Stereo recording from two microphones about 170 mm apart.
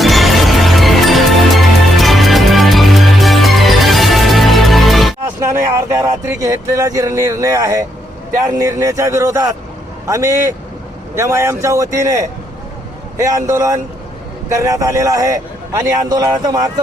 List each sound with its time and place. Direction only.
0.0 s music: centre (ahead or behind)
5.2 s a man's voice: 15° right (ahead or behind)